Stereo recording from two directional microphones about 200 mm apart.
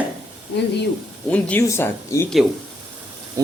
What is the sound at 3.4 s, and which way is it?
Speech, 15° right (ahead or behind).